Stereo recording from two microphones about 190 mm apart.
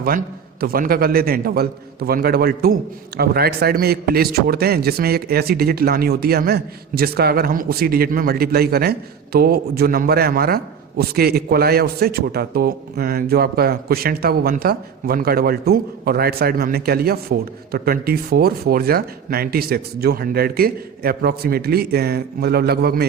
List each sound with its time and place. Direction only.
0.6 s a man's voice: 50° right (ahead or behind)